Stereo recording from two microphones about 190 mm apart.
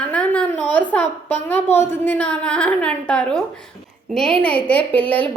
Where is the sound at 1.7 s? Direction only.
10° left (ahead or behind).